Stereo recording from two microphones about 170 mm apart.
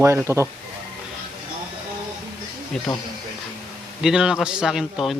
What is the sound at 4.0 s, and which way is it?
A man's voice, 5° right (ahead or behind).